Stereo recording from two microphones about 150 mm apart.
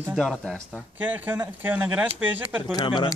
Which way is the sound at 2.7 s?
30° left (ahead or behind).